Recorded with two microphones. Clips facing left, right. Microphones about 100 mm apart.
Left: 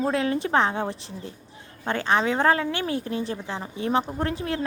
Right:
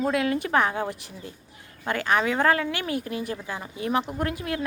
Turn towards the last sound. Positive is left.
turn(degrees=30)  # may be behind; listen again after turning